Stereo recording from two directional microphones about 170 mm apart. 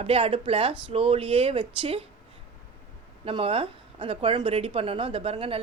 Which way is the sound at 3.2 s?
35° right (ahead or behind).